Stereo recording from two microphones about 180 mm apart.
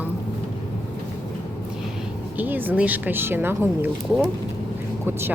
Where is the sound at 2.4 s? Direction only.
10° right (ahead or behind).